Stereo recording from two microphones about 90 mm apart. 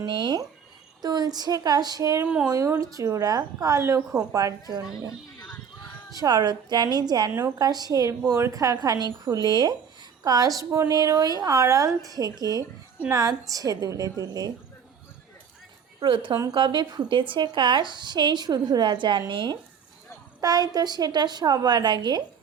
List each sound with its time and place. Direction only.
0.0 s speech: 60° right (ahead or behind)
1.0 s a woman's voice: 45° right (ahead or behind)
2.2 s speech: 15° right (ahead or behind)
2.5 s a woman's voice: 35° right (ahead or behind)
6.1 s a woman's voice: 45° right (ahead or behind)
7.3 s a woman's voice: 30° right (ahead or behind)
7.6 s a woman's voice: 45° right (ahead or behind)
10.2 s a woman's voice: 45° right (ahead or behind)
16.0 s speech: 65° right (ahead or behind)
20.4 s a woman's voice: 45° right (ahead or behind)